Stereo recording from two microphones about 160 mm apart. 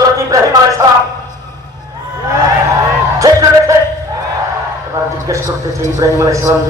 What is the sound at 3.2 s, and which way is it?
Speech, 20° right (ahead or behind).